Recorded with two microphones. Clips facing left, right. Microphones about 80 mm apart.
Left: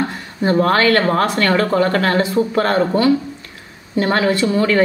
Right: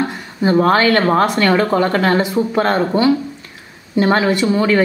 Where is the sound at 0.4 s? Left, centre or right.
Centre.